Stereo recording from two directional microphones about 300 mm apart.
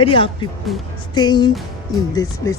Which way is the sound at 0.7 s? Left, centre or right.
Centre.